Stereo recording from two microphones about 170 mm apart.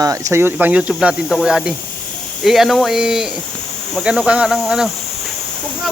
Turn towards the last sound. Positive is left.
turn(degrees=0)  # may be behind; listen again after turning